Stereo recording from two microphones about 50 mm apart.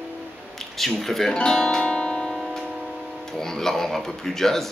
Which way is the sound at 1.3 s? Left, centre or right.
Centre.